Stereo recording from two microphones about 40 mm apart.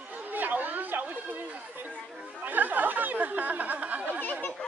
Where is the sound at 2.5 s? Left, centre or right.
Right.